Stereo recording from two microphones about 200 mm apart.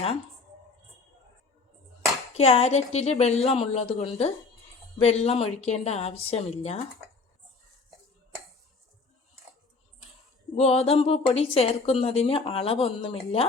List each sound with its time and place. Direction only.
2.4 s a woman's voice: 30° left (ahead or behind)
10.5 s a woman's voice: 30° left (ahead or behind)